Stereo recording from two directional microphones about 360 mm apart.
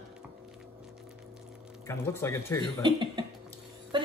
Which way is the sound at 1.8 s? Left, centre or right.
Centre.